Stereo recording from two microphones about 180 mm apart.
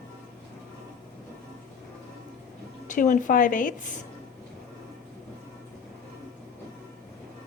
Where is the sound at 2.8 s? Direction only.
45° left (ahead or behind).